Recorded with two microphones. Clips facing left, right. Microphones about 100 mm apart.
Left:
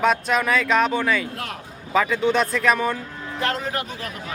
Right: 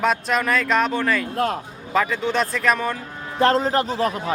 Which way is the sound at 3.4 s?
35° right (ahead or behind).